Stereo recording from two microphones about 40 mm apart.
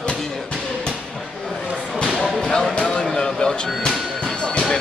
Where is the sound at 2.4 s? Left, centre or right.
Centre.